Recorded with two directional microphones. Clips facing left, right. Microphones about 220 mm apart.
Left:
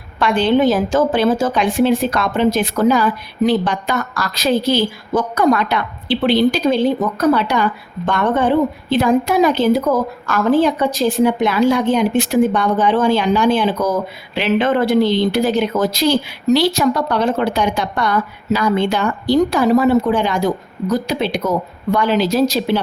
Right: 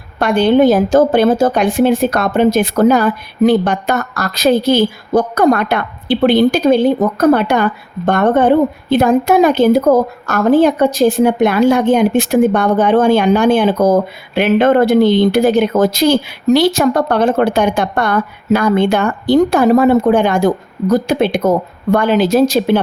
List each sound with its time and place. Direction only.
0.2 s speech: 45° right (ahead or behind)